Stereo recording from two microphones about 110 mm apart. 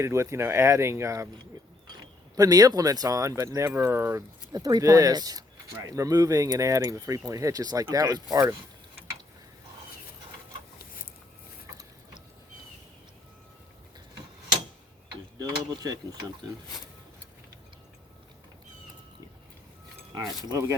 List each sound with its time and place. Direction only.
0.0 s speech: 25° right (ahead or behind)
2.3 s speech: 35° right (ahead or behind)
4.5 s speech: 35° right (ahead or behind)
15.4 s speech: 35° right (ahead or behind)
20.1 s speech: 35° right (ahead or behind)